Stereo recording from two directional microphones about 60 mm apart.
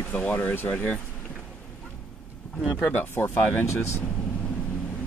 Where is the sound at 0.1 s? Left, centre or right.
Left.